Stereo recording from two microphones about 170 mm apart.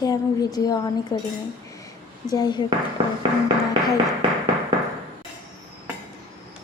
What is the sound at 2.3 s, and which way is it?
Speech, 25° left (ahead or behind).